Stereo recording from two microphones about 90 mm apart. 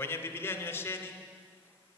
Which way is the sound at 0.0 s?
25° left (ahead or behind).